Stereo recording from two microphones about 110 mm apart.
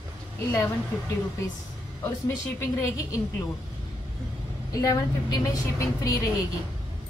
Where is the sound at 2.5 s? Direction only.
30° left (ahead or behind).